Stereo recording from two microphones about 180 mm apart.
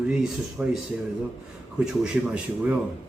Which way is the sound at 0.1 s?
5° right (ahead or behind).